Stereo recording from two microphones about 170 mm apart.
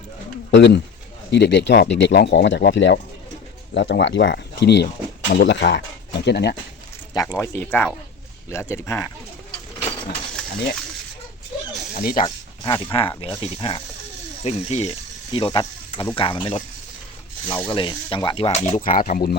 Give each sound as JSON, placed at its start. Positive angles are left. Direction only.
{"t": 0.5, "sound": "speech", "side_deg": 90}
{"t": 7.3, "sound": "speech", "side_deg": 10}
{"t": 11.9, "sound": "speech", "side_deg": 50}
{"t": 12.2, "sound": "speech", "side_deg": 30}
{"t": 18.8, "sound": "speech", "side_deg": 55}